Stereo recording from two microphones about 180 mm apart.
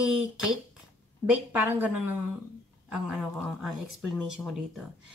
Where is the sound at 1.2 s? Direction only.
10° right (ahead or behind).